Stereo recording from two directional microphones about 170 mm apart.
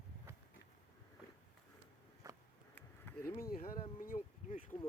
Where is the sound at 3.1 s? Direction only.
15° left (ahead or behind).